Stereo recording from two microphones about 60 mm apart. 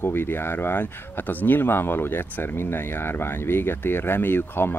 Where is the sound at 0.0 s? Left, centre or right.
Left.